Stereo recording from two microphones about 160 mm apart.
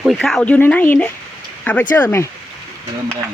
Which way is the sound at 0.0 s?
Centre (ahead or behind).